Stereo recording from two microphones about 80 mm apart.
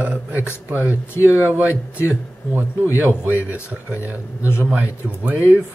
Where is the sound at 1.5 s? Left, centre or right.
Right.